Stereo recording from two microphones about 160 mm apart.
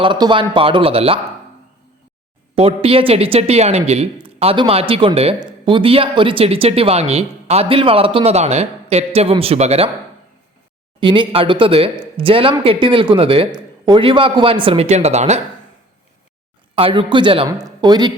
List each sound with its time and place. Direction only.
0.0 s speech: 30° right (ahead or behind)
2.6 s speech: 35° right (ahead or behind)
11.0 s speech: 30° right (ahead or behind)
16.7 s speech: 35° right (ahead or behind)